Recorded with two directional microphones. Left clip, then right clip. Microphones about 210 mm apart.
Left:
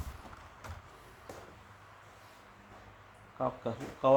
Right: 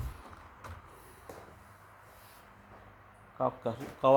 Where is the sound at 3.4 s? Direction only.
40° right (ahead or behind).